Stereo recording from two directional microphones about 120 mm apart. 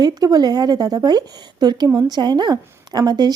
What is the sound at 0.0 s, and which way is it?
Speech, 35° right (ahead or behind).